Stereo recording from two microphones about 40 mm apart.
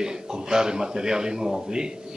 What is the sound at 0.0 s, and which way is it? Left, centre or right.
Speech, centre.